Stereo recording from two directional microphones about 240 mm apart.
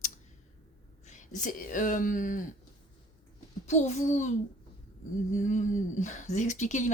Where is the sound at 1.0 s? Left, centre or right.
Left.